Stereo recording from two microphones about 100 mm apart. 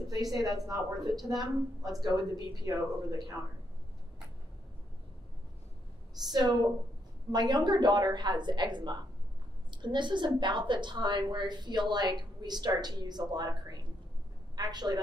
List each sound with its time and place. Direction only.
0.1 s a woman's voice: 40° right (ahead or behind)
6.2 s a woman's voice: 45° right (ahead or behind)